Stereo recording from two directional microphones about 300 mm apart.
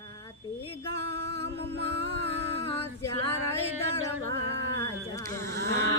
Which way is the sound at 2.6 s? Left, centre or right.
Centre.